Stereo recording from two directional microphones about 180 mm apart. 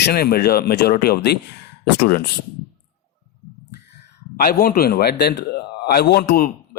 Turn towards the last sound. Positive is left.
turn(degrees=55)  # may be behind; listen again after turning